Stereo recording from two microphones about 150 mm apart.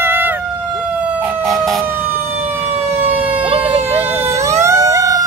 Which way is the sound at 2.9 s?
15° right (ahead or behind).